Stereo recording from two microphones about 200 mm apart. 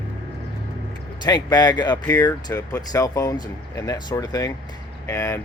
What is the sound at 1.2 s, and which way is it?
Speech, 20° left (ahead or behind).